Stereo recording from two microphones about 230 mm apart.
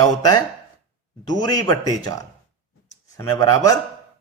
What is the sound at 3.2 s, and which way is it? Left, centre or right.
Speech, centre.